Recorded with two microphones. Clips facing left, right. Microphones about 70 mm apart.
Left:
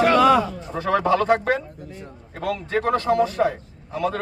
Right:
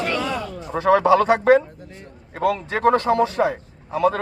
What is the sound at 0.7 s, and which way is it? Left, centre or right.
A man's voice, centre.